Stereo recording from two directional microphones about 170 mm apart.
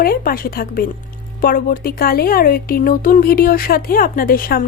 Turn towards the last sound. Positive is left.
turn(degrees=60)  # may be behind; listen again after turning